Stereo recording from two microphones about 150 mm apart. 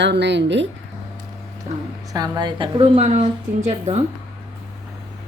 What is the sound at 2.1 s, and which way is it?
A woman's voice, 25° right (ahead or behind).